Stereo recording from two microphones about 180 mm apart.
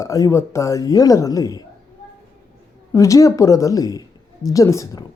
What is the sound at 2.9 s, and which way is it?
Speech, 15° left (ahead or behind).